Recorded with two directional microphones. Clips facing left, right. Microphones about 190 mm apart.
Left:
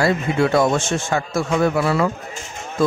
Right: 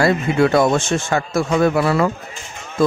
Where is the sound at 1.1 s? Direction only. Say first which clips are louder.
Right 1 dB; 60° right (ahead or behind).